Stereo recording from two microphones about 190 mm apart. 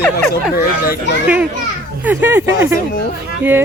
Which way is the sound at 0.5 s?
55° left (ahead or behind).